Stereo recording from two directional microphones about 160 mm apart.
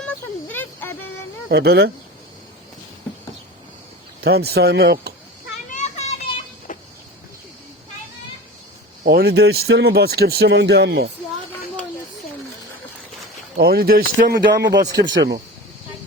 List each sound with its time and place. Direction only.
0.0 s a sound: 10° left (ahead or behind)
1.5 s speech: 90° right
4.2 s speech: 85° right
5.6 s children playing: 45° left (ahead or behind)
6.7 s a sound: 55° left (ahead or behind)
9.0 s speech: 90° right
13.6 s a man's voice: 70° right (ahead or behind); by 15.0 s 90° right